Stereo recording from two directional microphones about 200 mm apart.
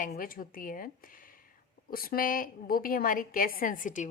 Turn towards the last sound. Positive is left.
turn(degrees=40)  # may be behind; listen again after turning